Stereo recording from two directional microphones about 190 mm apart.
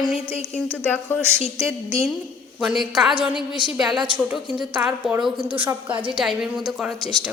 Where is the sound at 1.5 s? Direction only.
15° right (ahead or behind).